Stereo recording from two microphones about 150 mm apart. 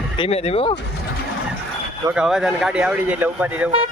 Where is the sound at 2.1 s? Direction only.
5° right (ahead or behind).